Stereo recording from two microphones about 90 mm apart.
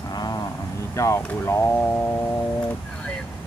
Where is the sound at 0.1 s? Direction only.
45° left (ahead or behind).